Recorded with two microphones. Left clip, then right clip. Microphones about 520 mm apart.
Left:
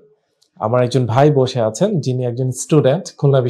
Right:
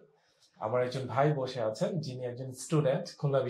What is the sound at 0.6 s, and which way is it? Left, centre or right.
Speech, left.